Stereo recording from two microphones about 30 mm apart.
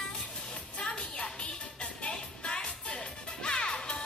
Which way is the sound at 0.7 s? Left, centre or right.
Left.